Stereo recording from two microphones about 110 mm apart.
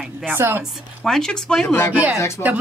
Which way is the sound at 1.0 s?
5° left (ahead or behind).